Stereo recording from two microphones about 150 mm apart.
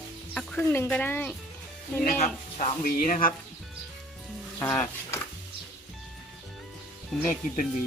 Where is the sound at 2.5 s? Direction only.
65° left (ahead or behind).